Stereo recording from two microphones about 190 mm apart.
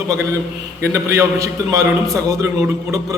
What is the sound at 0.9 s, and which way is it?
A man's voice, 15° right (ahead or behind).